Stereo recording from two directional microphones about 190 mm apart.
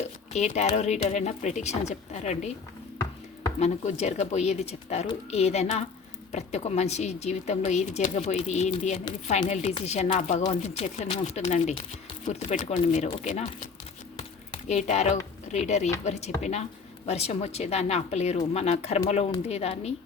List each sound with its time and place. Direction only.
0.0 s speech: 35° left (ahead or behind)
3.6 s speech: 35° left (ahead or behind)
14.2 s a sound: 35° left (ahead or behind)
15.5 s speech: 35° left (ahead or behind)